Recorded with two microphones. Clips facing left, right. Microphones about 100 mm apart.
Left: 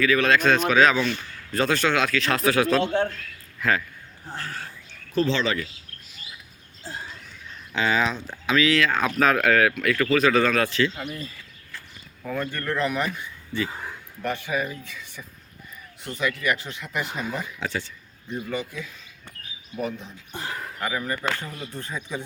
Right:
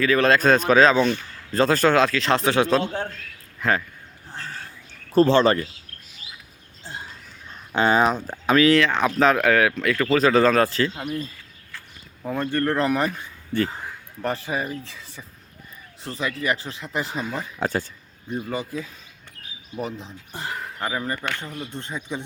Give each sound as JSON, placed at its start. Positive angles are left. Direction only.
{"t": 0.0, "sound": "a man's voice", "side_deg": -35}
{"t": 4.4, "sound": "frog", "side_deg": 75}
{"t": 5.1, "sound": "speech", "side_deg": -50}
{"t": 7.7, "sound": "speech", "side_deg": -45}
{"t": 8.9, "sound": "speech", "side_deg": -20}
{"t": 10.0, "sound": "a man's voice", "side_deg": -30}
{"t": 12.2, "sound": "a man's voice", "side_deg": -30}
{"t": 13.5, "sound": "speech", "side_deg": -50}
{"t": 14.2, "sound": "a man's voice", "side_deg": -35}
{"t": 17.6, "sound": "a man's voice", "side_deg": -45}